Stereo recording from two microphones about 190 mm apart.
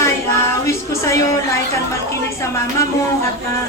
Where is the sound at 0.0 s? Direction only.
15° left (ahead or behind).